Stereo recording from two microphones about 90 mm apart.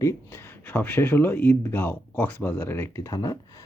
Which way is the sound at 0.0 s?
30° left (ahead or behind).